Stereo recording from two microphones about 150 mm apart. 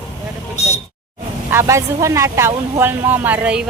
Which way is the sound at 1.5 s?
20° right (ahead or behind).